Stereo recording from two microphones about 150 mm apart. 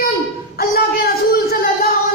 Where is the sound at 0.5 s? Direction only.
90° left.